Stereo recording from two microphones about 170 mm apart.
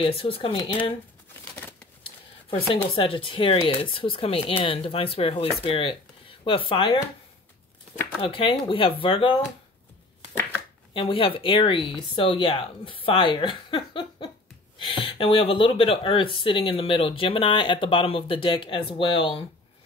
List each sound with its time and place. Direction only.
0.0 s speech: 35° left (ahead or behind)
2.5 s speech: 30° left (ahead or behind)
8.2 s speech: 30° left (ahead or behind)
10.9 s speech: 30° left (ahead or behind)